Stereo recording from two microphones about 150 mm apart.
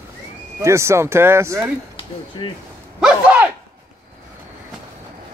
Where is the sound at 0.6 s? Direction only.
20° right (ahead or behind).